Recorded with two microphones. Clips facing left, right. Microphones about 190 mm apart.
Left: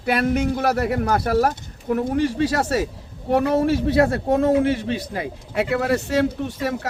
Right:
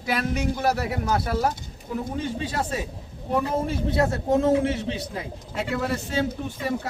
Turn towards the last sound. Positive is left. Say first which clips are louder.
# left 3 dB
turn(degrees=75)  # may be behind; listen again after turning